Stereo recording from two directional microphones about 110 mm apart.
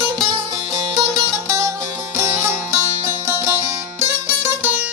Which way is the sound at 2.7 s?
25° right (ahead or behind).